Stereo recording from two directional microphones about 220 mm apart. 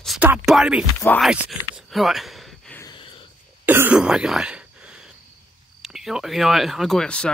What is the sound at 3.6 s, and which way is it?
Throat clearing, 10° right (ahead or behind).